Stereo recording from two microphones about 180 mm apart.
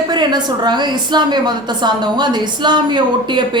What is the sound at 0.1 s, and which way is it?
A woman's voice, 25° right (ahead or behind).